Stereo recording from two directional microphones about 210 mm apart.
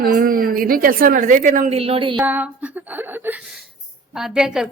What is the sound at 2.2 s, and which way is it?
A woman's voice, 10° right (ahead or behind).